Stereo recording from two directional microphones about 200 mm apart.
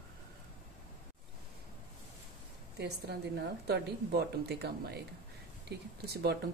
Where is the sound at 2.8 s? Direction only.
55° right (ahead or behind).